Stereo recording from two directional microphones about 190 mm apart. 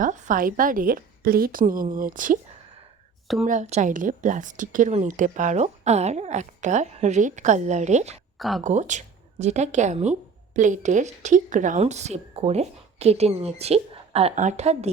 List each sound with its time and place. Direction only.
0.0 s a woman's voice: 45° right (ahead or behind)
3.4 s speech: 40° right (ahead or behind)
8.4 s speech: centre (ahead or behind)
8.6 s speech: 40° right (ahead or behind)